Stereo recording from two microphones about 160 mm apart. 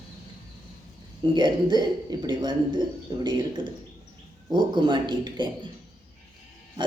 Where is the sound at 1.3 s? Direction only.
25° right (ahead or behind).